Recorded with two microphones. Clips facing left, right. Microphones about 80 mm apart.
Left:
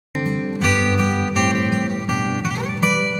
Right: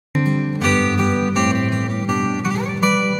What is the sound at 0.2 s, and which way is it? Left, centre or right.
Music, centre.